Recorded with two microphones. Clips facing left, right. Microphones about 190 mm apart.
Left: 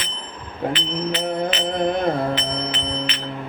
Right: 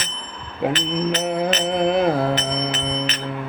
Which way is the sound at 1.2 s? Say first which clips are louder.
Right 1 dB; 5° right (ahead or behind).